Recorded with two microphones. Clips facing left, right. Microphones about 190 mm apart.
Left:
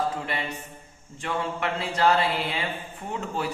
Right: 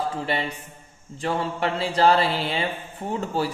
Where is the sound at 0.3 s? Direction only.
30° right (ahead or behind).